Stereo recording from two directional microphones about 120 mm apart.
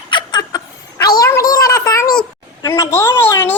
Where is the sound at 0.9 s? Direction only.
25° left (ahead or behind).